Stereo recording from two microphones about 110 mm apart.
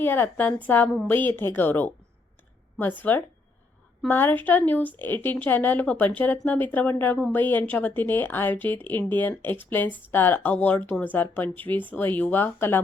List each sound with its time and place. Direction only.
0.0 s speech: 20° left (ahead or behind)